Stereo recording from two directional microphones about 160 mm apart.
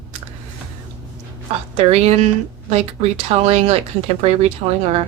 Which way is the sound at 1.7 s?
40° right (ahead or behind).